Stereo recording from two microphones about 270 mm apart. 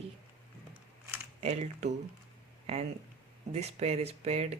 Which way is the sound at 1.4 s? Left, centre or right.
Right.